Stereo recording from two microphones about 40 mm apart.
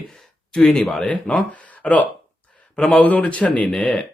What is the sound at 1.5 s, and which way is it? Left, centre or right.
Speech, left.